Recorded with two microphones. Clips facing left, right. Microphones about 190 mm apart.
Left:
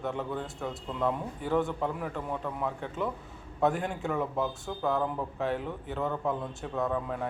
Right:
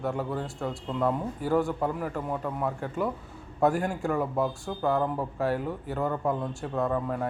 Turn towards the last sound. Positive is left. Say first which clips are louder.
# right 3 dB
turn(degrees=0)  # may be behind; listen again after turning